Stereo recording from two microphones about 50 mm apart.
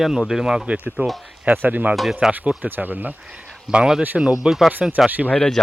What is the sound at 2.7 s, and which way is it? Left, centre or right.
Speech, right.